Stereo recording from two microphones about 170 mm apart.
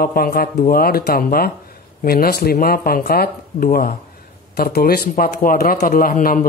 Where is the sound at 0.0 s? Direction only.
60° left (ahead or behind).